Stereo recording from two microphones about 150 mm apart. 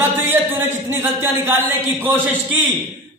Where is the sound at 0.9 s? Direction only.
15° right (ahead or behind).